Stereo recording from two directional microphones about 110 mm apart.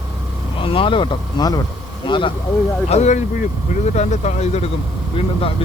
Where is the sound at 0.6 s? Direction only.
55° left (ahead or behind).